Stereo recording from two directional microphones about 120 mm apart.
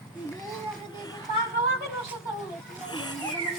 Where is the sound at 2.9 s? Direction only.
35° left (ahead or behind).